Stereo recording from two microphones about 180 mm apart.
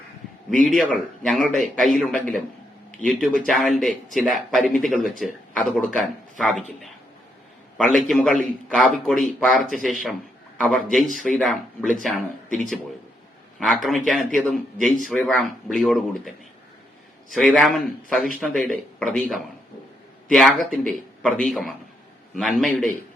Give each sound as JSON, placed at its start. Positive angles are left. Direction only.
{"t": 0.8, "sound": "a man's voice", "side_deg": 5}
{"t": 7.8, "sound": "a man's voice", "side_deg": 0}
{"t": 13.6, "sound": "a man's voice", "side_deg": 0}
{"t": 17.3, "sound": "a man's voice", "side_deg": 5}